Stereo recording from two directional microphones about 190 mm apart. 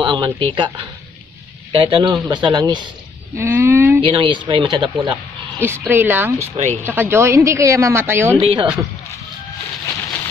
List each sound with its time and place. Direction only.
0.0 s a woman's voice: 25° right (ahead or behind)
4.0 s speech: 25° right (ahead or behind)
5.6 s a woman's voice: 10° right (ahead or behind)
6.5 s speech: 35° right (ahead or behind)
6.8 s a woman's voice: 10° right (ahead or behind)
8.4 s speech: 30° right (ahead or behind)